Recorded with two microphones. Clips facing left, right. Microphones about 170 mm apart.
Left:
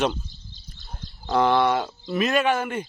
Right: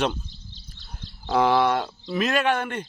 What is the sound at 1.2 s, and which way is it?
Speech, centre (ahead or behind).